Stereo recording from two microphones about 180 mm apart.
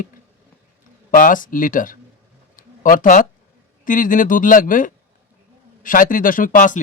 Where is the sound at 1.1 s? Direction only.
50° left (ahead or behind).